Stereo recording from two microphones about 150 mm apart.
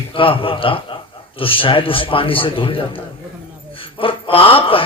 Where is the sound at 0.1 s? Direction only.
35° left (ahead or behind).